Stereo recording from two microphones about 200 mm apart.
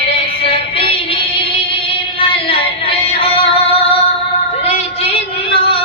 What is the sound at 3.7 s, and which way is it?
Music, 30° left (ahead or behind).